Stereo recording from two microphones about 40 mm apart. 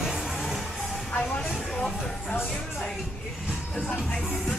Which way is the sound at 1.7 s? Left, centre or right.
Centre.